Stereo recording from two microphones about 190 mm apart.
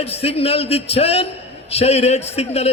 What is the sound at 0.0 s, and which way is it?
A man's voice, 30° left (ahead or behind).